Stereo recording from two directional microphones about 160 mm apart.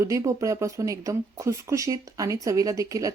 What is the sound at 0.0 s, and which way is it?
Speech, 20° right (ahead or behind).